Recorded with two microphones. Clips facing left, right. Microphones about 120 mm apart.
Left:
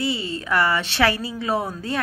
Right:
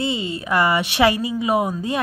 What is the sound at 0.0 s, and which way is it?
A woman's voice, 20° right (ahead or behind).